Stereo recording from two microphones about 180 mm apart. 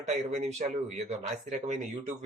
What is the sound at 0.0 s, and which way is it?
Speech, 40° right (ahead or behind).